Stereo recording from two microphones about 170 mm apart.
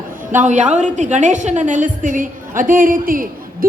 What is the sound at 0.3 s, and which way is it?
A woman's voice, 45° right (ahead or behind).